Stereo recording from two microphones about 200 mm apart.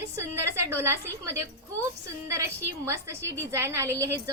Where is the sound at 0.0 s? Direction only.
15° right (ahead or behind).